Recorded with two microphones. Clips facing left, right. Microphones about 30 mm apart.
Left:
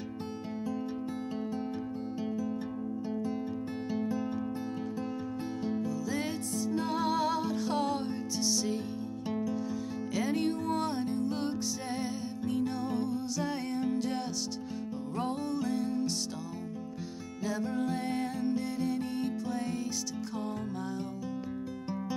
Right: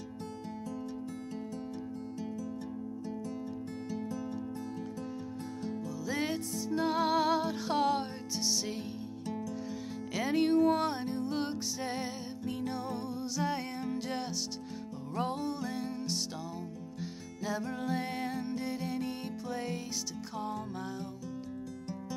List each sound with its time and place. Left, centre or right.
3.9 s music: left
5.9 s music: centre
10.1 s music: centre
17.5 s music: centre